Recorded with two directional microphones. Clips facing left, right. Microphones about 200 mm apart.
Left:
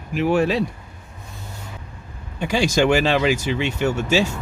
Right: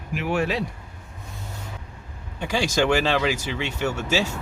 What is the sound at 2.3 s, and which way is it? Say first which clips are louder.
Speech: left 4 dB; 15° left (ahead or behind).